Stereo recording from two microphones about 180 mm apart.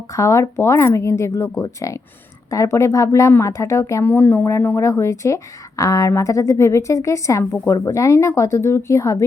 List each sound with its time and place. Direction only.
0.1 s speech: 15° left (ahead or behind)